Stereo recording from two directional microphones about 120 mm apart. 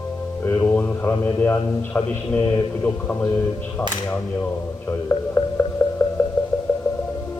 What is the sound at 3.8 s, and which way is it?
Speech, 20° left (ahead or behind).